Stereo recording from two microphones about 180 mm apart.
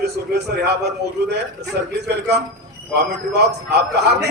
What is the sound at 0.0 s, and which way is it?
Speech, 65° right (ahead or behind).